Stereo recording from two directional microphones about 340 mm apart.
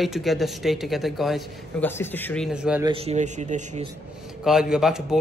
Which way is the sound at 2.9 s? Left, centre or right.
Centre.